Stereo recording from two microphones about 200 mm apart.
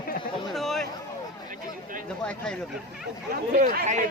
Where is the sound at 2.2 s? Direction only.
5° left (ahead or behind).